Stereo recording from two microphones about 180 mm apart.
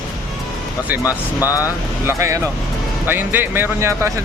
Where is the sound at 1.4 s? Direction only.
20° left (ahead or behind).